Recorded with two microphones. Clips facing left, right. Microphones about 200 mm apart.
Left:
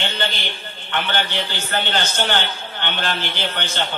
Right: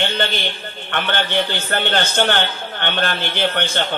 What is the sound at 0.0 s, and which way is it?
A man's voice, 55° right (ahead or behind).